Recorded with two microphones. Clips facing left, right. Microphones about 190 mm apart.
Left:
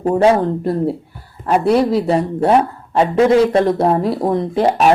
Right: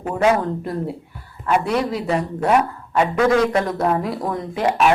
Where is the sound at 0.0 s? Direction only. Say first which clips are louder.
Left 5 dB; 35° left (ahead or behind).